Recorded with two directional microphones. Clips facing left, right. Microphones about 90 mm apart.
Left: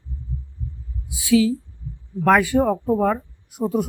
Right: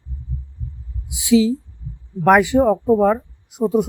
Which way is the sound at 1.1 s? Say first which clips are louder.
Right 2 dB; 20° right (ahead or behind).